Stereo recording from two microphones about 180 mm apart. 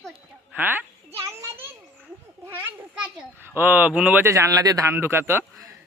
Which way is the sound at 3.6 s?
10° right (ahead or behind).